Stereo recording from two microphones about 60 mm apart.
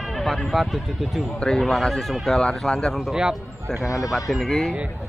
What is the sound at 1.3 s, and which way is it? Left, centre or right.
Speech, centre.